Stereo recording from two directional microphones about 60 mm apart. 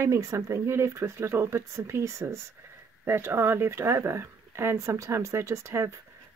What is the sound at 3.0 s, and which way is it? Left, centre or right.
Speech, right.